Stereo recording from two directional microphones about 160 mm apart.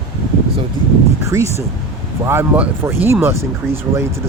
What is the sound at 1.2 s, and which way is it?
Speech, 20° right (ahead or behind).